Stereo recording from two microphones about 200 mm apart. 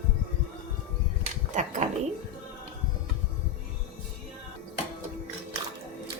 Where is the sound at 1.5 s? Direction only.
40° right (ahead or behind).